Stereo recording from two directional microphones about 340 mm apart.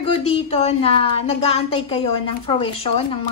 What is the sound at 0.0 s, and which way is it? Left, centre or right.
A woman's voice, centre.